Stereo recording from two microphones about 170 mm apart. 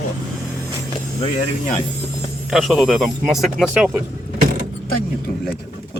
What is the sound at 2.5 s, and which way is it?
Speech, centre (ahead or behind).